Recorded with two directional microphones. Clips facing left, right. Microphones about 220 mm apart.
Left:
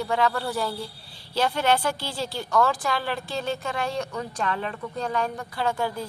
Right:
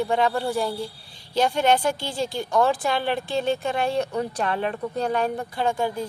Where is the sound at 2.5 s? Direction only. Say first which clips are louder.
Right 2 dB; 25° right (ahead or behind).